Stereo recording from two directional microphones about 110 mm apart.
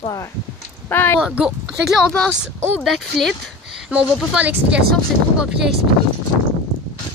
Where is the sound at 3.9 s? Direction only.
10° right (ahead or behind).